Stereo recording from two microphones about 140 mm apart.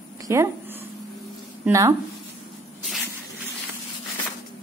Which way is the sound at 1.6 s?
25° right (ahead or behind).